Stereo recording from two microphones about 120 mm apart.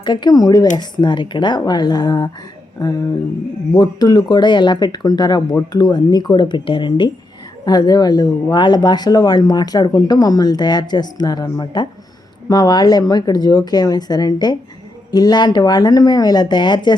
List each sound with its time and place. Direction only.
0.0 s speech: 40° left (ahead or behind)